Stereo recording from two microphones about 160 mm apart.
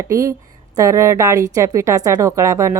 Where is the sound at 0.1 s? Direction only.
20° right (ahead or behind).